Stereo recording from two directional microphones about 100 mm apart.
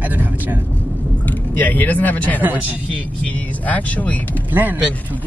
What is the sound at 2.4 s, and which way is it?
Speech, 15° right (ahead or behind).